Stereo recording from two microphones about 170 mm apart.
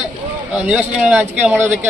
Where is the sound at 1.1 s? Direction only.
10° right (ahead or behind).